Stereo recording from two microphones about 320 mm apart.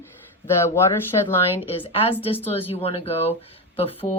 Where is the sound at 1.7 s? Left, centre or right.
Centre.